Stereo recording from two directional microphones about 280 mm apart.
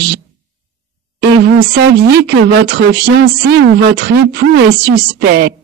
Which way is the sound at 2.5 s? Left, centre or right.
Right.